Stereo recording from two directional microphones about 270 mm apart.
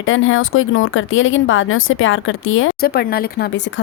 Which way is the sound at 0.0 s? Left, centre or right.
Left.